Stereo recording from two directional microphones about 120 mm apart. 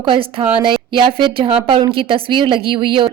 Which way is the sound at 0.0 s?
50° right (ahead or behind).